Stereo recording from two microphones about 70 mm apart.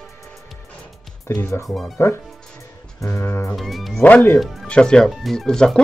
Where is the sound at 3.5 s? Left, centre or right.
Centre.